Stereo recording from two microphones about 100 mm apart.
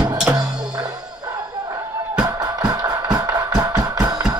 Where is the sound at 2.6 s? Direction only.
40° right (ahead or behind).